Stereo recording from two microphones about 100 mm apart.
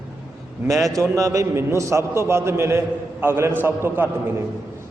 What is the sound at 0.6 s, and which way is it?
A man's voice, 30° right (ahead or behind).